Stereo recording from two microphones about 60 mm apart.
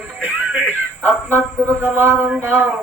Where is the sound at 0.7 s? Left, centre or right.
Right.